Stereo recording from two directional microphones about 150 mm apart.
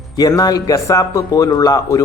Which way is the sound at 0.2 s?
25° left (ahead or behind).